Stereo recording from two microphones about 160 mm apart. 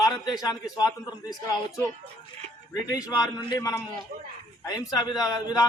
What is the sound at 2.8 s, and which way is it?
Speech, 25° left (ahead or behind).